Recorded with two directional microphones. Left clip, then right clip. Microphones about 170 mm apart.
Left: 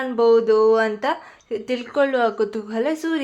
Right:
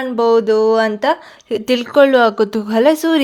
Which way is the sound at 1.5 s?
55° right (ahead or behind).